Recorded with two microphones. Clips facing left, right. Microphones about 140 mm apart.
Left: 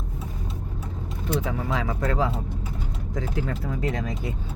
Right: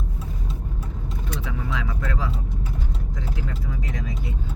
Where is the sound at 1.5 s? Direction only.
40° left (ahead or behind); by 4.1 s 55° left (ahead or behind).